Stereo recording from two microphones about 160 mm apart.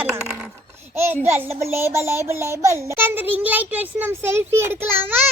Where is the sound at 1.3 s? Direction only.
15° right (ahead or behind).